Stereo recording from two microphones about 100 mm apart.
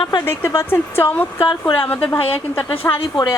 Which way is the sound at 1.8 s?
15° left (ahead or behind).